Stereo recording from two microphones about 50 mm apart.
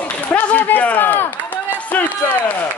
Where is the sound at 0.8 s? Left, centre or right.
Left.